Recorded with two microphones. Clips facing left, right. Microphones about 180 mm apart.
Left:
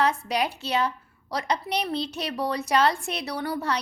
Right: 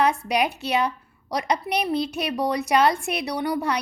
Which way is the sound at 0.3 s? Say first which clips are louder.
Right 3 dB; 15° right (ahead or behind).